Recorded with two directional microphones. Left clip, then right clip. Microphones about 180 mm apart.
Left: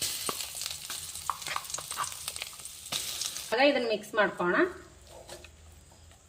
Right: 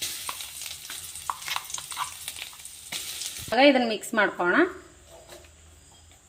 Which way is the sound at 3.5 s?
50° right (ahead or behind).